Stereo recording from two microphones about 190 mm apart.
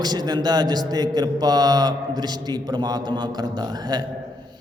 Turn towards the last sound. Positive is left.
turn(degrees=-20)  # may be behind; listen again after turning